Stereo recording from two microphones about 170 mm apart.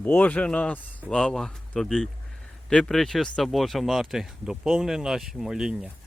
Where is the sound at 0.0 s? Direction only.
10° left (ahead or behind).